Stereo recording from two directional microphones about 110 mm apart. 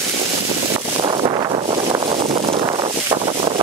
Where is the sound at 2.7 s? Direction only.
45° right (ahead or behind).